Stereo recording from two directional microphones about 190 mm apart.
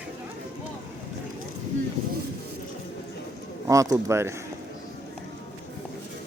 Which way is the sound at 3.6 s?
15° right (ahead or behind).